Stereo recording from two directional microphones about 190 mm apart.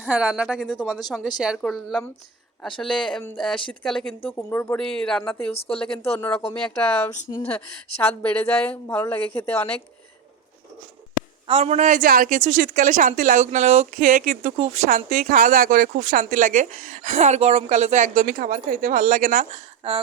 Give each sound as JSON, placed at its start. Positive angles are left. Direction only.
{"t": 0.0, "sound": "speech", "side_deg": -5}
{"t": 5.5, "sound": "speech", "side_deg": 30}
{"t": 6.0, "sound": "a woman's voice", "side_deg": 10}
{"t": 11.4, "sound": "a woman's voice", "side_deg": -35}
{"t": 19.8, "sound": "a sound", "side_deg": -30}